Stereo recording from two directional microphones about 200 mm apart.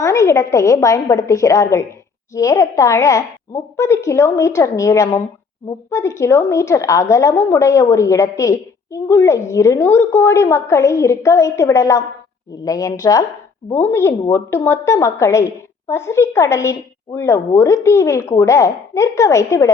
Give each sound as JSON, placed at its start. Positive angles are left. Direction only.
{"t": 0.0, "sound": "a woman's voice", "side_deg": 15}